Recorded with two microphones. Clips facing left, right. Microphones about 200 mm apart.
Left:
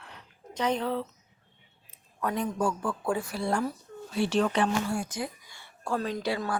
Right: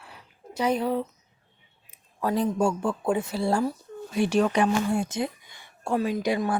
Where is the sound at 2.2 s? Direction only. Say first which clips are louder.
Right 5 dB; 30° right (ahead or behind).